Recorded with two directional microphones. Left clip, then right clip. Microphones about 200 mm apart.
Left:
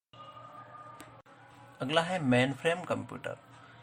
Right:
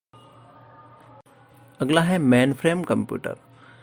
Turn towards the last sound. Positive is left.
turn(degrees=-45)  # may be behind; listen again after turning